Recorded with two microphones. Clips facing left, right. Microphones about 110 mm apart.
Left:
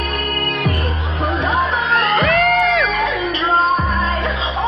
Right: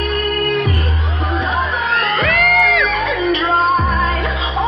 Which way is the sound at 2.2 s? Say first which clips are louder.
Left 1 dB; 35° left (ahead or behind).